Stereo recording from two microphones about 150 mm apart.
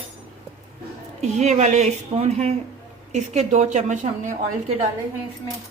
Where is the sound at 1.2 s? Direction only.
50° right (ahead or behind).